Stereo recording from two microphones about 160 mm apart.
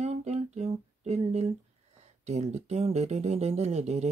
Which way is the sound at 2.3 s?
45° right (ahead or behind).